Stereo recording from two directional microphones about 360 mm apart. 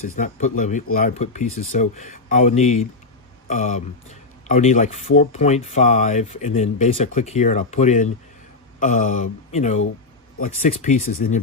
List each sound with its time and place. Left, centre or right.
0.2 s speech: left